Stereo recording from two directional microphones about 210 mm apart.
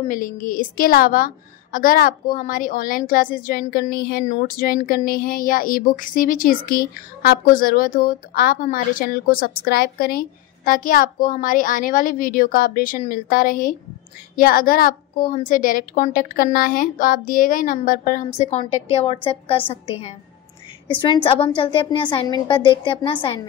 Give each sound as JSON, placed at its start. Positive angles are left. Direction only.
{"t": 0.1, "sound": "a woman's voice", "side_deg": 40}